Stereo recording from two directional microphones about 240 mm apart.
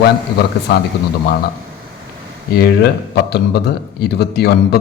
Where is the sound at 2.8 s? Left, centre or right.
Left.